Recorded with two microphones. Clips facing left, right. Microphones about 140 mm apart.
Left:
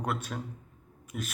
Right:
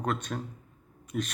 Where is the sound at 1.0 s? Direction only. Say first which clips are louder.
Right 6 dB; 5° left (ahead or behind).